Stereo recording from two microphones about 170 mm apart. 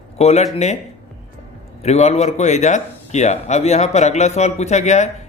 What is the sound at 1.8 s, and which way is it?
A man's voice, 40° left (ahead or behind).